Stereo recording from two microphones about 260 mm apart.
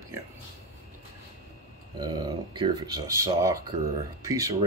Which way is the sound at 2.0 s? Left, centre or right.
Centre.